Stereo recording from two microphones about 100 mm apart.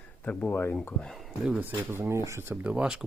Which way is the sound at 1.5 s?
20° right (ahead or behind).